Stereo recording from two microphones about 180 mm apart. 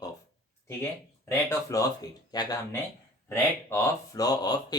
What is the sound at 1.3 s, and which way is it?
Speech, 15° left (ahead or behind).